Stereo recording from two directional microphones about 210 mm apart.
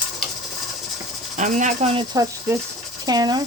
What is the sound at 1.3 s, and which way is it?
Speech, 35° right (ahead or behind).